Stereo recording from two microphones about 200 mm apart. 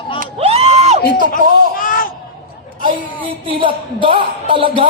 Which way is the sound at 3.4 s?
25° right (ahead or behind).